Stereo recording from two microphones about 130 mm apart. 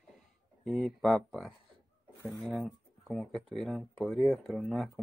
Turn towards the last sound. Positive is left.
turn(degrees=0)  # may be behind; listen again after turning